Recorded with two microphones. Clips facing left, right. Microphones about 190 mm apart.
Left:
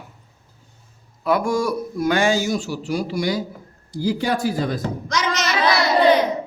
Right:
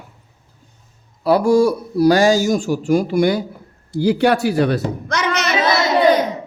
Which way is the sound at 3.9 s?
70° right (ahead or behind).